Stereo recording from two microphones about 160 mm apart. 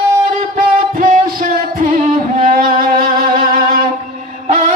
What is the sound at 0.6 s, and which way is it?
Music, 55° right (ahead or behind).